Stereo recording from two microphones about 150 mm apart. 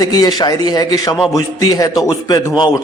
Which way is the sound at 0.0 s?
25° left (ahead or behind).